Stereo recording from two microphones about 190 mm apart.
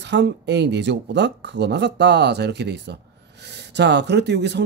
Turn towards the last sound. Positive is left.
turn(degrees=-65)  # may be behind; listen again after turning